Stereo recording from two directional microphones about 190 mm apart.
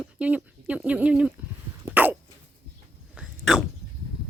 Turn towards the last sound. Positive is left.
turn(degrees=-5)  # may be behind; listen again after turning